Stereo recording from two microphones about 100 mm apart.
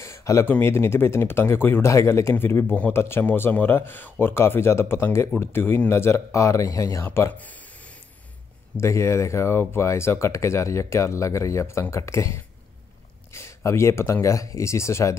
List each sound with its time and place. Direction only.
0.0 s speech: 30° left (ahead or behind)
7.3 s a sound: 15° left (ahead or behind)
8.7 s speech: 30° left (ahead or behind)
13.3 s speech: 25° left (ahead or behind)